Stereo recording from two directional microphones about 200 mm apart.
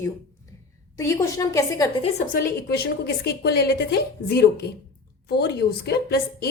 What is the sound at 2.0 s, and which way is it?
A woman's voice, 40° left (ahead or behind).